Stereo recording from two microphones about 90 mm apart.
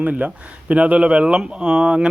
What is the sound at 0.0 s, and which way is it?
Speech, 15° right (ahead or behind).